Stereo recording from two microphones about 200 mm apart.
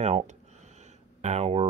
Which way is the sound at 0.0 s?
35° right (ahead or behind).